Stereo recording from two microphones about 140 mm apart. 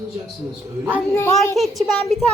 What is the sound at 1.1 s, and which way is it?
Speech, 20° left (ahead or behind).